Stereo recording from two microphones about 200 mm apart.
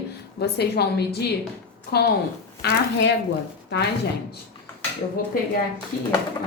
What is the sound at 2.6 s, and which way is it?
Speech, 55° left (ahead or behind).